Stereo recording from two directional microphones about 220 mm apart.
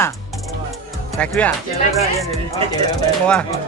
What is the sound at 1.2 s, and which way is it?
Speech, 5° left (ahead or behind).